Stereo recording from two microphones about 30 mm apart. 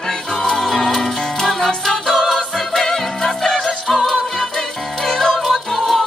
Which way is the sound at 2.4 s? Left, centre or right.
Centre.